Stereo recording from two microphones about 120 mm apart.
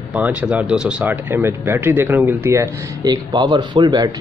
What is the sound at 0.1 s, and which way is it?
Speech, 10° right (ahead or behind).